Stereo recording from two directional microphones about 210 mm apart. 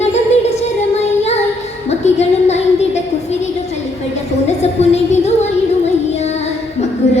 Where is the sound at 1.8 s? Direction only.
30° left (ahead or behind).